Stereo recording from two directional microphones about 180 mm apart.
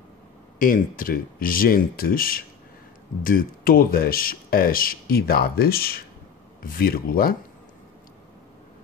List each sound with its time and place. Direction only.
0.6 s speech: 50° left (ahead or behind)